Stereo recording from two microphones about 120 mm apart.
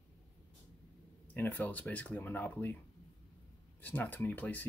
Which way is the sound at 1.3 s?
15° left (ahead or behind).